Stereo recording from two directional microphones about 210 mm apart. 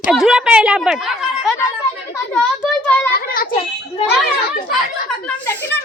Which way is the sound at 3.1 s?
45° left (ahead or behind).